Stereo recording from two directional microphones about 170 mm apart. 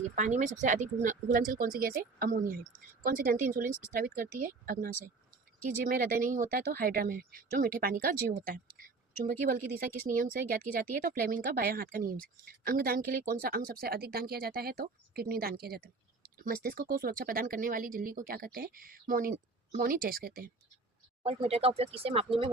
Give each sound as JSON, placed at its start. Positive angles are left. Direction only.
{"t": 0.2, "sound": "a woman's voice", "side_deg": -45}
{"t": 21.2, "sound": "speech", "side_deg": -35}